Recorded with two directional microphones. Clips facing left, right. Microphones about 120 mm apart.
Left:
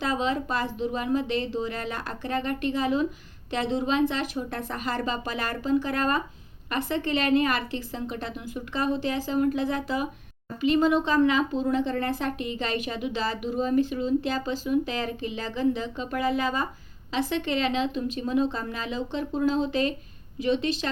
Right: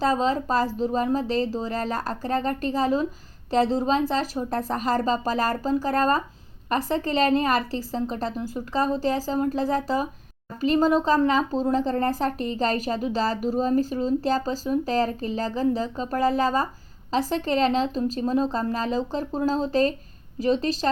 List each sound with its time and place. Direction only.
0.0 s speech: 35° right (ahead or behind)